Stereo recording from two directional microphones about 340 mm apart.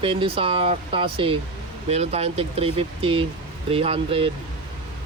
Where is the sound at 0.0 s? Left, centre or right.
Centre.